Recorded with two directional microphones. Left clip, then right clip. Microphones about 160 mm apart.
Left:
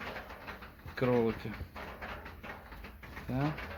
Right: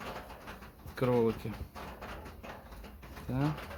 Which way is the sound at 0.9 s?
10° right (ahead or behind).